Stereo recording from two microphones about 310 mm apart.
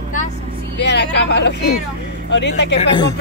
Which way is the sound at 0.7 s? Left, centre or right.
Left.